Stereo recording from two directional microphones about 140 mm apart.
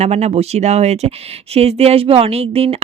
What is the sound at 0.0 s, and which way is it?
Speech, 50° right (ahead or behind).